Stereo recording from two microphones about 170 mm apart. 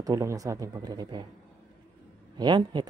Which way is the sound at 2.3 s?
25° right (ahead or behind).